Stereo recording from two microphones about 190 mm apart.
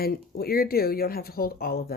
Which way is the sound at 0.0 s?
55° left (ahead or behind).